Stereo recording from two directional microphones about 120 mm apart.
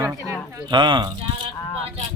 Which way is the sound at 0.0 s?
25° right (ahead or behind).